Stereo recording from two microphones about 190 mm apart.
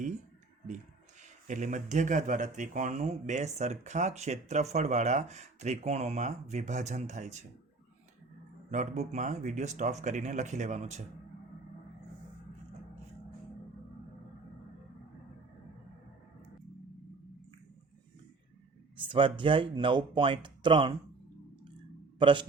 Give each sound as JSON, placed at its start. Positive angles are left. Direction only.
{"t": 1.2, "sound": "speech", "side_deg": -40}
{"t": 8.7, "sound": "speech", "side_deg": -40}
{"t": 18.9, "sound": "speech", "side_deg": -25}
{"t": 22.2, "sound": "speech", "side_deg": -25}